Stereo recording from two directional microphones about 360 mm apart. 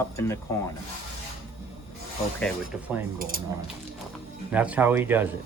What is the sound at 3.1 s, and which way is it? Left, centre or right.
Speech, right.